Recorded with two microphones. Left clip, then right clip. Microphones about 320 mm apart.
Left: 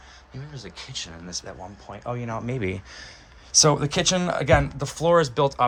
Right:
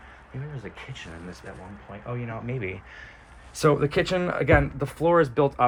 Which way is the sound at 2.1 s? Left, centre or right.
Centre.